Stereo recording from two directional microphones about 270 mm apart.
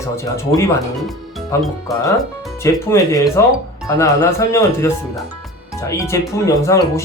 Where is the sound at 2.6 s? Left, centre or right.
Centre.